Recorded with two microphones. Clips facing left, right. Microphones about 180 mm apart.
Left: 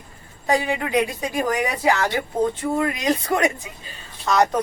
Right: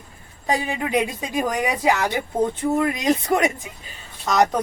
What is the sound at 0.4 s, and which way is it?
Speech, 20° right (ahead or behind).